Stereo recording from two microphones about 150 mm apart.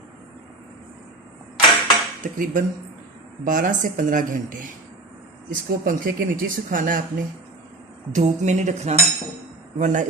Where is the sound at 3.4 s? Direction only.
60° right (ahead or behind).